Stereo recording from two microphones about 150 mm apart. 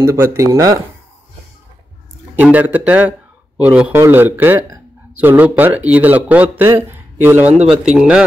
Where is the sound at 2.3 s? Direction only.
10° right (ahead or behind).